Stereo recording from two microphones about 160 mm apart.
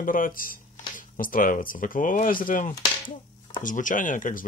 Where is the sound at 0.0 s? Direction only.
60° left (ahead or behind).